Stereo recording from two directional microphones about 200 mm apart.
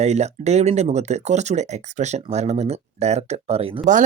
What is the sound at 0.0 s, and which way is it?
Speech, 35° right (ahead or behind).